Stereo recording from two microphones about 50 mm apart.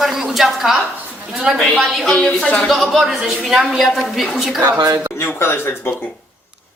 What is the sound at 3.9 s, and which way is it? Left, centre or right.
Speech, centre.